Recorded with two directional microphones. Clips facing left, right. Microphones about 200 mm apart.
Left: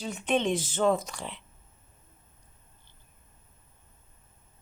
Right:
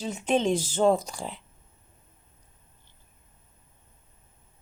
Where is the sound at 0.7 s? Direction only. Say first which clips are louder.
Right 3 dB; 30° right (ahead or behind).